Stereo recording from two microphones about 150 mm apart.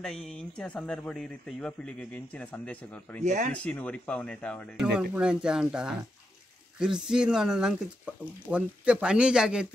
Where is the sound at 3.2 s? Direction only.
55° right (ahead or behind).